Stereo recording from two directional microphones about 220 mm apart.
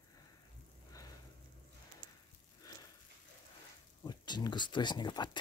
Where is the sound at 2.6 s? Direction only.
15° left (ahead or behind).